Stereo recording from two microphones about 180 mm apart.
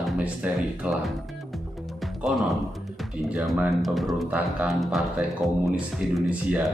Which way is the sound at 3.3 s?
5° right (ahead or behind).